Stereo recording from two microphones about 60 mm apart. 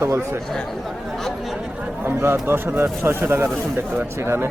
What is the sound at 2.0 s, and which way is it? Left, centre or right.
Speech, right.